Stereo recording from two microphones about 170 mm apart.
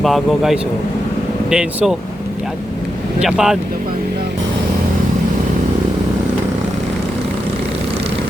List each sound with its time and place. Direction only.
0.0 s a man's voice: centre (ahead or behind)
3.2 s a man's voice: 5° right (ahead or behind)